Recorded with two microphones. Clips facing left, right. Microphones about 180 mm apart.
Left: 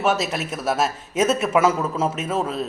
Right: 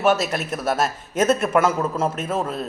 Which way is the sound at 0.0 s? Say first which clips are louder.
Right 2 dB; centre (ahead or behind).